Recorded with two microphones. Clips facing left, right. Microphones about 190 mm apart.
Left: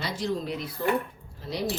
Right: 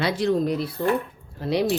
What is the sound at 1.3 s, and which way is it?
Speech, 70° right (ahead or behind).